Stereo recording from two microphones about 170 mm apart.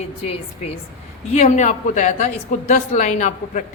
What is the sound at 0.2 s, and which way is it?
A woman's voice, 35° left (ahead or behind).